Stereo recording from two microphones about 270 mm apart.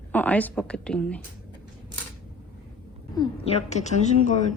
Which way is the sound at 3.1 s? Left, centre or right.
Left.